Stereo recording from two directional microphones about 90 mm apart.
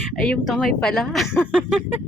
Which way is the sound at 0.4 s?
Centre (ahead or behind).